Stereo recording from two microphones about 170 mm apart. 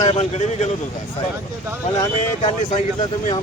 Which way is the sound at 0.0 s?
40° left (ahead or behind).